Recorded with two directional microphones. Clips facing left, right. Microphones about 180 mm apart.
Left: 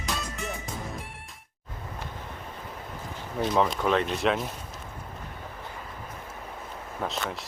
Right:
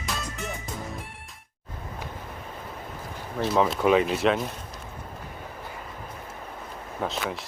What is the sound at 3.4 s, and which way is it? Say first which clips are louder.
Speech: right 2 dB; 5° right (ahead or behind).